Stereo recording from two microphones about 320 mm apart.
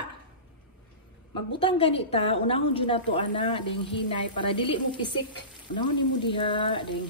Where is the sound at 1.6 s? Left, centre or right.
Centre.